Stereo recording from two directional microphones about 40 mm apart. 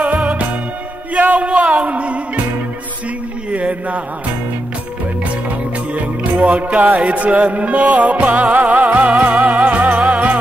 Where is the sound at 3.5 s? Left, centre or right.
Right.